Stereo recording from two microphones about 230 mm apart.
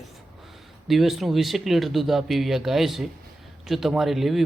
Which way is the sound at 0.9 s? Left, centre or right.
Centre.